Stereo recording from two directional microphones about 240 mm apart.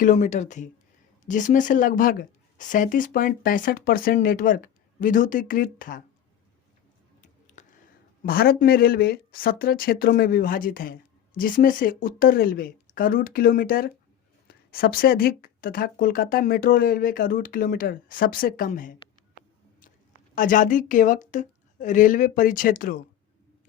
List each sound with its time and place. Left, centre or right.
0.0 s speech: left
7.2 s a sound: left
8.2 s speech: left
20.3 s speech: left